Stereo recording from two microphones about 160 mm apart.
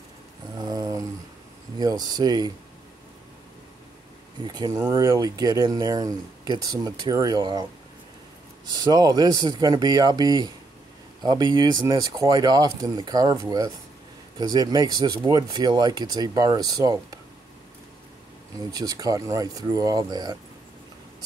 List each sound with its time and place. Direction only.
0.6 s snoring: 25° right (ahead or behind)
1.8 s speech: 25° right (ahead or behind)
4.4 s speech: 25° right (ahead or behind)
8.7 s speech: 25° right (ahead or behind)
18.6 s speech: 25° right (ahead or behind)